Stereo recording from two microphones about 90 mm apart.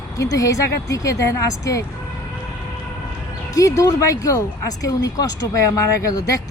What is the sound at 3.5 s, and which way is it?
Speech, 40° left (ahead or behind).